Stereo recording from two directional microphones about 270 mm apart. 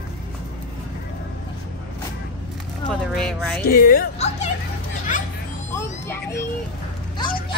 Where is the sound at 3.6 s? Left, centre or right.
Left.